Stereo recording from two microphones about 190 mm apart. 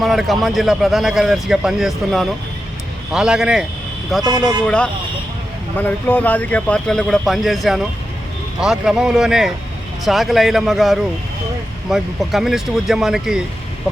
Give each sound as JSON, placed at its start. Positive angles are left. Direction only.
{"t": 0.0, "sound": "a man's voice", "side_deg": 0}